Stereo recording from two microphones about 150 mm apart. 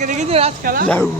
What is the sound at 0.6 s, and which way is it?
Speech, 75° right (ahead or behind).